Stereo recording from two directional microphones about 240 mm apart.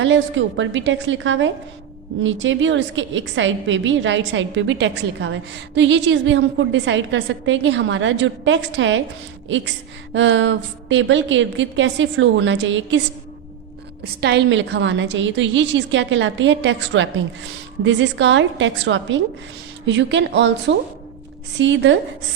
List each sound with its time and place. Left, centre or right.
0.0 s a woman's voice: right
14.0 s a woman's voice: right